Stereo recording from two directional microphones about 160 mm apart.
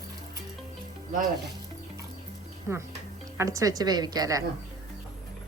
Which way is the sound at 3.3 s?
20° right (ahead or behind).